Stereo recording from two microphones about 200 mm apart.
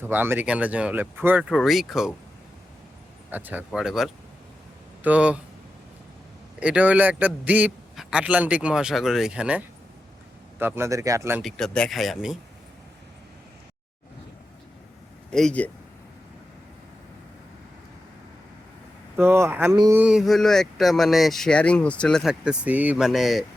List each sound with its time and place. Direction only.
0.1 s speech: 10° right (ahead or behind)
3.3 s speech: 10° right (ahead or behind)
6.6 s speech: 5° right (ahead or behind)
11.4 s speech: 5° left (ahead or behind)
15.3 s speech: 5° left (ahead or behind)
19.1 s speech: 10° right (ahead or behind)
19.7 s a sound: 20° right (ahead or behind)
20.0 s speech: 5° right (ahead or behind)